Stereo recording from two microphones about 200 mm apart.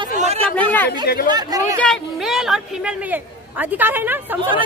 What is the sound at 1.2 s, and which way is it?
Speech, 20° right (ahead or behind).